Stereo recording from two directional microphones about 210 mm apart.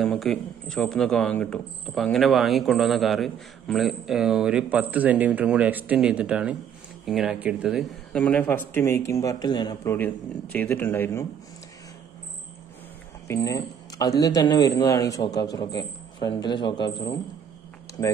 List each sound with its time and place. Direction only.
0.0 s a man's voice: centre (ahead or behind); by 9.9 s 20° left (ahead or behind)
9.9 s speech: 10° left (ahead or behind)
13.3 s speech: 15° left (ahead or behind)